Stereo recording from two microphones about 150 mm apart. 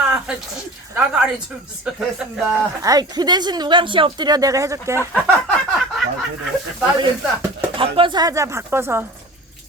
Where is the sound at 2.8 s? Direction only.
25° right (ahead or behind).